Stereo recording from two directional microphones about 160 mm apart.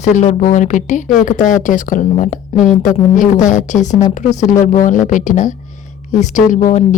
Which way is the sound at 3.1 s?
55° left (ahead or behind).